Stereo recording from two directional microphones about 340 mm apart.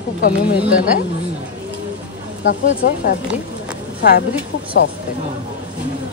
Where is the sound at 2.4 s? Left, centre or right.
Left.